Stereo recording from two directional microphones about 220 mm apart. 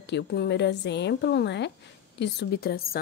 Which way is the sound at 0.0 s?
50° left (ahead or behind).